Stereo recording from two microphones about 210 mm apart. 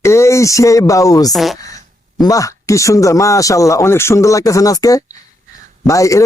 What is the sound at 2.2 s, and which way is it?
A man's voice, 15° left (ahead or behind).